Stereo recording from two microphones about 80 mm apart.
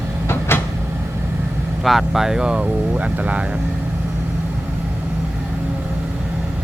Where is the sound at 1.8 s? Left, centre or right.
Centre.